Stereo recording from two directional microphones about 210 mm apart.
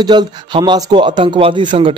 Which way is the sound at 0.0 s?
20° right (ahead or behind).